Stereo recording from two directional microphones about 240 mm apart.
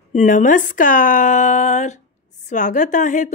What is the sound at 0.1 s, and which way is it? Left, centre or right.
A woman's voice, left.